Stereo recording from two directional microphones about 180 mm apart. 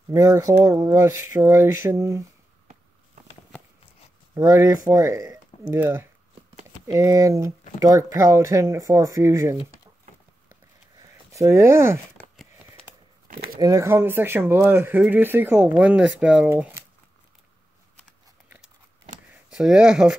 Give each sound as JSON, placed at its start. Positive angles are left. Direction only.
{"t": 0.1, "sound": "speech", "side_deg": -15}
{"t": 4.3, "sound": "speech", "side_deg": -15}
{"t": 10.5, "sound": "a sound", "side_deg": -15}
{"t": 13.3, "sound": "speech", "side_deg": -55}
{"t": 13.6, "sound": "speech", "side_deg": -20}
{"t": 19.5, "sound": "speech", "side_deg": -5}